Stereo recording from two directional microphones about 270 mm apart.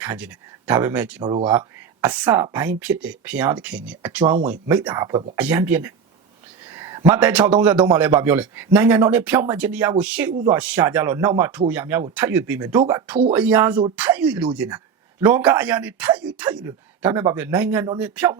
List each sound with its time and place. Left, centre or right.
0.0 s a man's voice: centre